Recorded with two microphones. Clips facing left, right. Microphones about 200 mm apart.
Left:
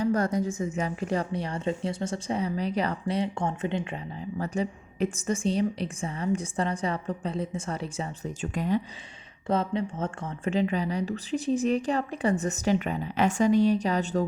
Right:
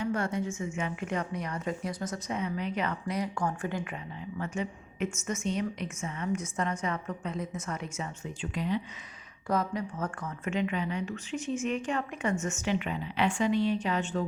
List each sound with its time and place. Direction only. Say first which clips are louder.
0.0 s a woman's voice: left 5 dB; 40° left (ahead or behind)
9.5 s a woman's voice: left 3 dB; 25° left (ahead or behind)